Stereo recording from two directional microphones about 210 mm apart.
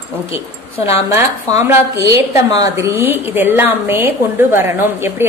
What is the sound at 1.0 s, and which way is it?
A woman's voice, 15° right (ahead or behind).